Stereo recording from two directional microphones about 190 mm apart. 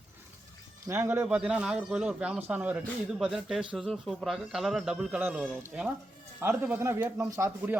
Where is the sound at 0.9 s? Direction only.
10° right (ahead or behind).